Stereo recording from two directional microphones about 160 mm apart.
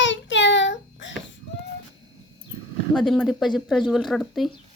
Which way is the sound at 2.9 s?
Centre (ahead or behind).